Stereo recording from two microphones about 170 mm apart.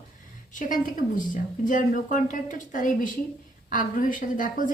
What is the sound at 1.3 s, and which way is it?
A woman's voice, 50° left (ahead or behind).